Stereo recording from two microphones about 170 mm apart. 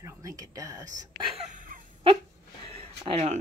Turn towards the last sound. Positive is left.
turn(degrees=-40)  # may be behind; listen again after turning